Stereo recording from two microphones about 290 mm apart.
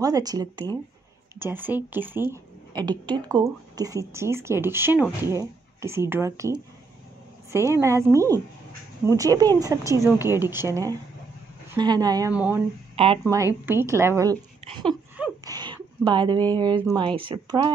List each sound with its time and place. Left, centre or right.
0.0 s speech: centre
7.5 s speech: centre
12.9 s speech: centre
15.4 s a sound: centre
16.9 s speech: centre